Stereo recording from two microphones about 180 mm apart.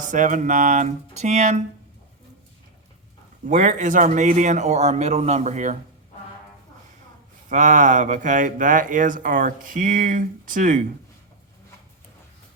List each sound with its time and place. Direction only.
0.0 s speech: 45° right (ahead or behind)
3.4 s a man's voice: 45° right (ahead or behind)
7.5 s speech: 45° right (ahead or behind)